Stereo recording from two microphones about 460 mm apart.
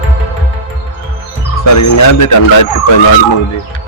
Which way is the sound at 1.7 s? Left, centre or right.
Left.